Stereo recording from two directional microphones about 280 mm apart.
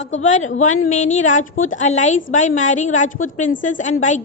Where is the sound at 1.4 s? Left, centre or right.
Left.